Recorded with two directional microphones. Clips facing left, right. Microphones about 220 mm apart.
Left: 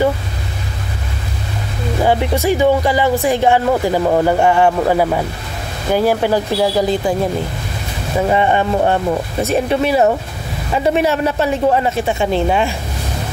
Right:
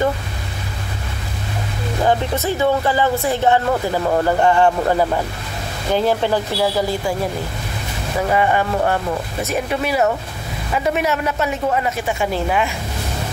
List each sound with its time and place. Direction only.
2.0 s speech: 10° left (ahead or behind)
8.2 s a man's voice: 25° left (ahead or behind)